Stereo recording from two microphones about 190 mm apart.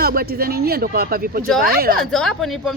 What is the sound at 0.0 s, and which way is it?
Speech, 55° right (ahead or behind).